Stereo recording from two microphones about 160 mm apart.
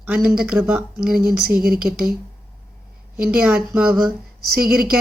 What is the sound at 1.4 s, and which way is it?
Speech, 70° right (ahead or behind).